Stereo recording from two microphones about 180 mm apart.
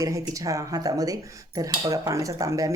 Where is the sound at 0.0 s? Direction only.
20° right (ahead or behind).